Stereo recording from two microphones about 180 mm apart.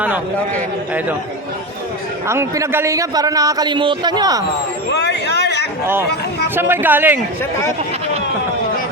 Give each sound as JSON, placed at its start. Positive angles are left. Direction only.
{"t": 2.2, "sound": "a man's voice", "side_deg": -15}
{"t": 4.9, "sound": "a sound", "side_deg": 70}
{"t": 6.6, "sound": "a man's voice", "side_deg": -10}